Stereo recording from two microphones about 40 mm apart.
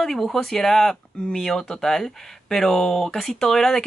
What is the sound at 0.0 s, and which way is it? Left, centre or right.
Speech, centre.